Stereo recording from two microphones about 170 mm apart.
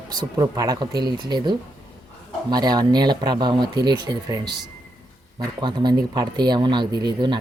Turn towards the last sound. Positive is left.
turn(degrees=-25)  # may be behind; listen again after turning